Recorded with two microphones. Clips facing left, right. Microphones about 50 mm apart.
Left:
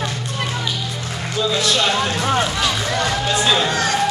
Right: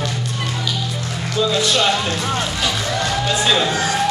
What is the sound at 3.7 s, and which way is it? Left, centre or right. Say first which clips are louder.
Speech: even; left.